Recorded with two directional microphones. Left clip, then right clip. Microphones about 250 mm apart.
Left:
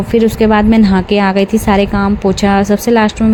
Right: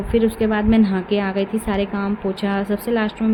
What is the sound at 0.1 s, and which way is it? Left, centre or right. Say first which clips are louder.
Speech: left 8 dB; left.